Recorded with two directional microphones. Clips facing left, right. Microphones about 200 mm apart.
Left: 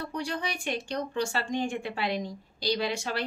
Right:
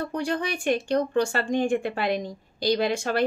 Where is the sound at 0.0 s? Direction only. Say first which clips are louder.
Right 6 dB; 50° right (ahead or behind).